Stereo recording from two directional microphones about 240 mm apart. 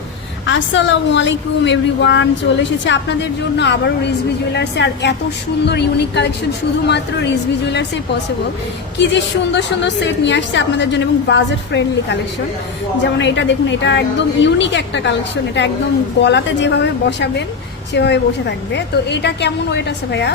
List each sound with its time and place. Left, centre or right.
0.4 s a woman's voice: left
9.0 s a woman's voice: left
13.1 s a woman's voice: left
16.2 s a woman's voice: left